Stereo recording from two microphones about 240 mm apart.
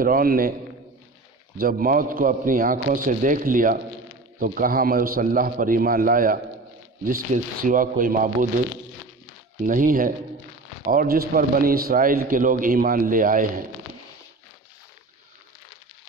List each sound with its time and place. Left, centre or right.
0.0 s a man's voice: right
1.6 s a man's voice: right
9.6 s a man's voice: right